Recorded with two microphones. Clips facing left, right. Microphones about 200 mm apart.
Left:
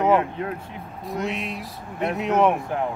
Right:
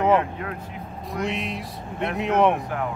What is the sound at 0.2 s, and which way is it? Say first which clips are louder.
Speech: left 2 dB; 30° left (ahead or behind).